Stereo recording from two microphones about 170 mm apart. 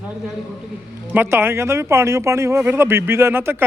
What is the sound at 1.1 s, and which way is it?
Speech, 10° right (ahead or behind).